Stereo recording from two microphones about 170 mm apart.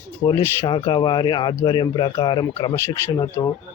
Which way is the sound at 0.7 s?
30° left (ahead or behind).